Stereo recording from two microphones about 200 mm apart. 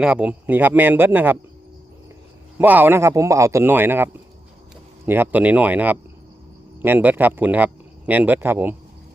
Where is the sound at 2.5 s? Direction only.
10° right (ahead or behind).